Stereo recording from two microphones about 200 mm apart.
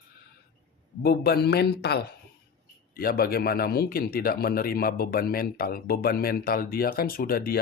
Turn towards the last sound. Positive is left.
turn(degrees=45)  # may be behind; listen again after turning